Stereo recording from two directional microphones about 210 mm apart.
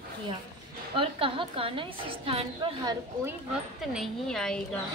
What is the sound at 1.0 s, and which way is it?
A woman's voice, 25° right (ahead or behind).